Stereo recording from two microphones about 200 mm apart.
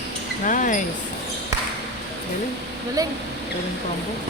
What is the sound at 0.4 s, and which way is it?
Speech, 40° left (ahead or behind).